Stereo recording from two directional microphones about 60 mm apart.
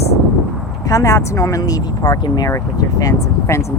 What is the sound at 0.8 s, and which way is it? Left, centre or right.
Speech, left.